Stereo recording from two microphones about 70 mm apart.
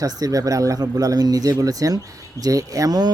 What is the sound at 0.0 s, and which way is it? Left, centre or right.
Speech, right.